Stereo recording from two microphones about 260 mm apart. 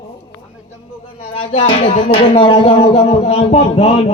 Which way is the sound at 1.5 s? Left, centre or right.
Left.